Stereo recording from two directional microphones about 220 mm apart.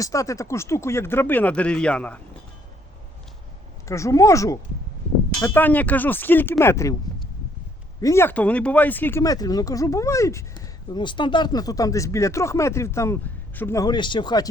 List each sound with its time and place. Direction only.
0.0 s speech: 15° left (ahead or behind)
3.8 s speech: 15° left (ahead or behind)
8.0 s speech: 10° left (ahead or behind)